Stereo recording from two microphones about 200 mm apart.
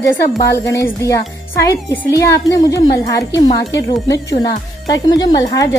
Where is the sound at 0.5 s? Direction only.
15° left (ahead or behind).